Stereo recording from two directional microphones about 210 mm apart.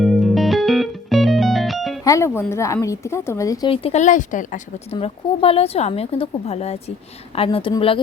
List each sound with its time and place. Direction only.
0.0 s music: centre (ahead or behind)
2.0 s a woman's voice: 15° left (ahead or behind)
3.7 s speech: 30° left (ahead or behind)
4.9 s speech: 25° left (ahead or behind)